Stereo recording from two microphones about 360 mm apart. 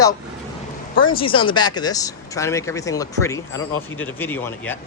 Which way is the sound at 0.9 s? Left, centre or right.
Left.